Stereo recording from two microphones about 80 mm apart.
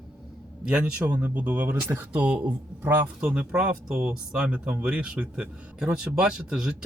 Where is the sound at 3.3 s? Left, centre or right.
Centre.